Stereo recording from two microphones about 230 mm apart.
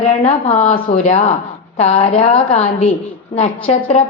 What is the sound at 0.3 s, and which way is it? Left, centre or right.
A woman's voice, left.